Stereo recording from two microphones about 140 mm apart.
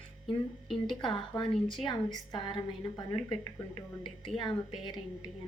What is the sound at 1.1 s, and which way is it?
A woman's voice, 35° left (ahead or behind).